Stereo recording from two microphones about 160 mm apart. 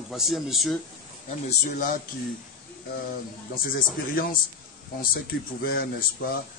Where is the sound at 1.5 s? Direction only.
55° left (ahead or behind).